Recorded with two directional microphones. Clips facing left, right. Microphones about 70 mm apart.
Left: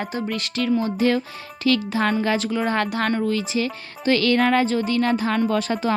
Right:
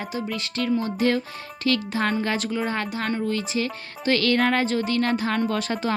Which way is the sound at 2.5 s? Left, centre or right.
Left.